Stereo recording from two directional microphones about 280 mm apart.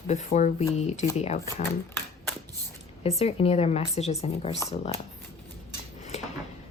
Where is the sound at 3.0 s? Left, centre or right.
Left.